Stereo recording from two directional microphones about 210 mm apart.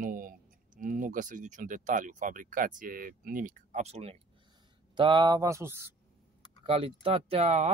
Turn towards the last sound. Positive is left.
turn(degrees=-30)  # may be behind; listen again after turning